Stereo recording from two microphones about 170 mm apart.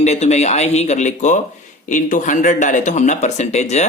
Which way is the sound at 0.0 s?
40° left (ahead or behind).